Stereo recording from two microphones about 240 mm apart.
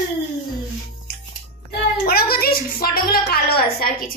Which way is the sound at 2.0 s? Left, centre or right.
Left.